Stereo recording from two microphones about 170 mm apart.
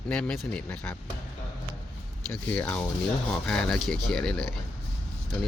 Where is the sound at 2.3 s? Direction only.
10° left (ahead or behind).